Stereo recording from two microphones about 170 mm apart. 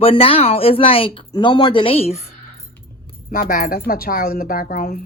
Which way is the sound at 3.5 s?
60° left (ahead or behind).